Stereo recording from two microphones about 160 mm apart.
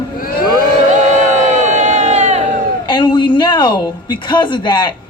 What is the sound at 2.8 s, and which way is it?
A man's voice, 30° left (ahead or behind).